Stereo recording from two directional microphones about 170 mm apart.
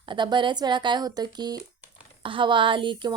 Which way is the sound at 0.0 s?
30° right (ahead or behind).